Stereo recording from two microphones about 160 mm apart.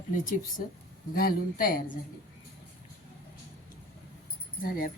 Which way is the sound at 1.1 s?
65° left (ahead or behind).